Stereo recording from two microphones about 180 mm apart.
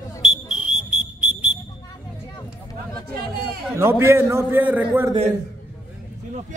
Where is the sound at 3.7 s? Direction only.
15° right (ahead or behind).